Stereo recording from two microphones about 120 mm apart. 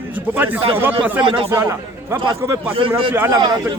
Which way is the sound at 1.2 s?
45° right (ahead or behind).